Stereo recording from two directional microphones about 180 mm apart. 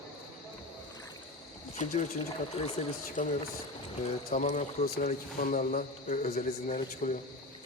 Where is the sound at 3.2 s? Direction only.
45° left (ahead or behind).